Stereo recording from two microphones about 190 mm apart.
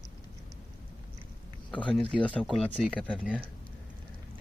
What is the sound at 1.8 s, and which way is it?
Speech, 5° left (ahead or behind).